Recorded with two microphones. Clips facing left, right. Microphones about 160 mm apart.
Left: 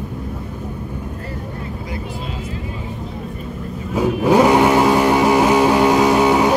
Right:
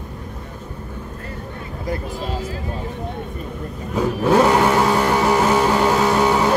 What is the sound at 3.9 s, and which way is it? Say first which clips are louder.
Vehicle: left 2 dB; 10° left (ahead or behind).